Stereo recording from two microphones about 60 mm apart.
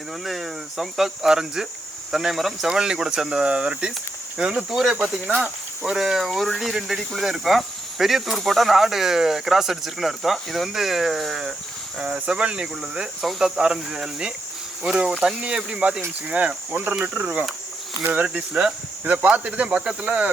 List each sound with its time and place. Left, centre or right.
0.3 s speech: centre; by 20.3 s right